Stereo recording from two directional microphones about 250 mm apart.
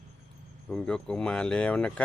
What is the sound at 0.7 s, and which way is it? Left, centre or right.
Speech, centre.